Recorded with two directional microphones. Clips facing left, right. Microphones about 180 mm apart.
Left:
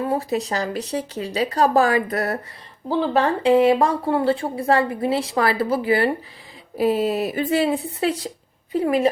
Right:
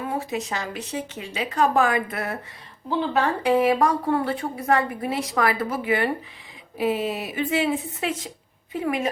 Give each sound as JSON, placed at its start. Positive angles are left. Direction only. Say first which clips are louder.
{"t": 0.1, "sound": "speech", "louder": "left 5 dB", "side_deg": 35}